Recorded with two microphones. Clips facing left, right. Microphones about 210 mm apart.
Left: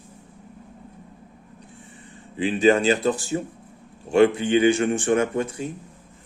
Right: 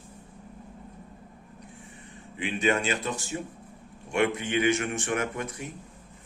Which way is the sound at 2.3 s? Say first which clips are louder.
Left 8 dB; 35° left (ahead or behind).